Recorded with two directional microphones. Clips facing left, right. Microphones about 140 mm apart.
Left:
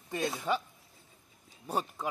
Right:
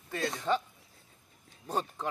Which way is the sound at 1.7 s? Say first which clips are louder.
Even; 10° left (ahead or behind).